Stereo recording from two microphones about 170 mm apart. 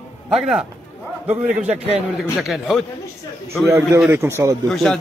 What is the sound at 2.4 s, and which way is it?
Speech, centre (ahead or behind).